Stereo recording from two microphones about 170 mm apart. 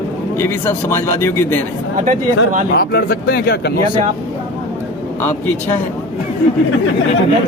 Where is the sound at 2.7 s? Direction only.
65° left (ahead or behind).